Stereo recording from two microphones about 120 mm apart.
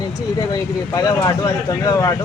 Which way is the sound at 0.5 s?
30° left (ahead or behind).